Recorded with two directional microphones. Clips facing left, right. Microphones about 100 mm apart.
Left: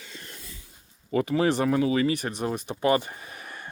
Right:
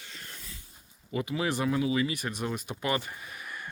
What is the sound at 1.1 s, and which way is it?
Speech, 45° left (ahead or behind).